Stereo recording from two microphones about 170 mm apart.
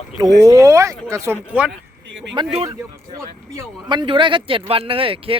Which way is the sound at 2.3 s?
35° right (ahead or behind).